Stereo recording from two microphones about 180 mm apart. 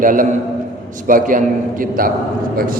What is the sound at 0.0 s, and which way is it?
A man's voice, 50° right (ahead or behind).